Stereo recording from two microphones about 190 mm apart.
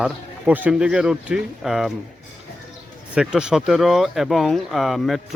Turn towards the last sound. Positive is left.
turn(degrees=0)  # may be behind; listen again after turning